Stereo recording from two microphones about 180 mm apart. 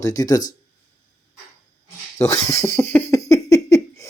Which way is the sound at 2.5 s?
15° left (ahead or behind).